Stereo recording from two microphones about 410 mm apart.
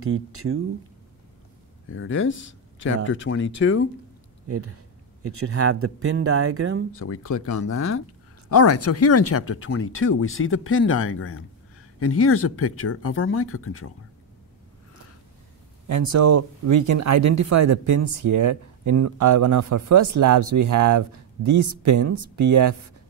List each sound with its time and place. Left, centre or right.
0.0 s speech: right
1.9 s speech: left
5.2 s speech: right
7.0 s speech: left
15.9 s speech: right